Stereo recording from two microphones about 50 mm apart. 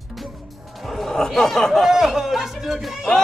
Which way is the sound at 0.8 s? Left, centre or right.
Centre.